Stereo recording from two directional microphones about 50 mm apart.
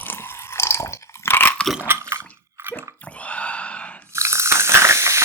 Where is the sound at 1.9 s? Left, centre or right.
Right.